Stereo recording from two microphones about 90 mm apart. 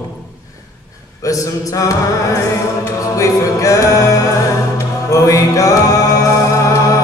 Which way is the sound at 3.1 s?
40° left (ahead or behind).